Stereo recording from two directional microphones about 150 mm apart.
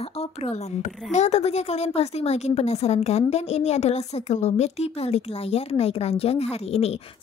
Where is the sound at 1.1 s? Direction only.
50° left (ahead or behind).